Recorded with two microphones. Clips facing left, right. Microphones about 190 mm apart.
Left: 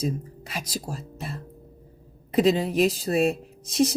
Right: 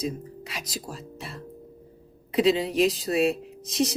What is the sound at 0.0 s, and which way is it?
Speech, 45° left (ahead or behind).